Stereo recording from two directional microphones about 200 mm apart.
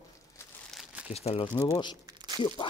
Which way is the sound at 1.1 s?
30° left (ahead or behind).